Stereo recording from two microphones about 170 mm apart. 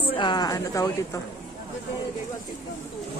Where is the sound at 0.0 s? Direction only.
30° left (ahead or behind).